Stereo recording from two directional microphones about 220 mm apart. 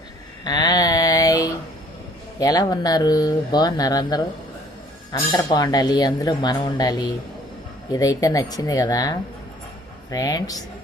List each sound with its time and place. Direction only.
0.4 s a sound: 20° left (ahead or behind)
2.4 s speech: 15° left (ahead or behind)
5.3 s speech: 20° left (ahead or behind)
7.9 s speech: 15° left (ahead or behind)